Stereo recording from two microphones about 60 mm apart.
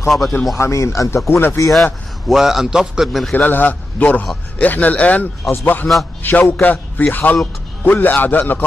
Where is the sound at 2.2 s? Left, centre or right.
Centre.